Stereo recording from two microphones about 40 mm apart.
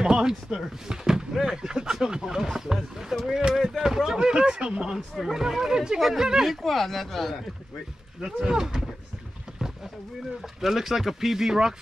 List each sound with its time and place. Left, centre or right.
0.0 s speech: centre
6.4 s speech: centre
8.2 s speech: centre
9.6 s wild animals: centre
10.4 s speech: centre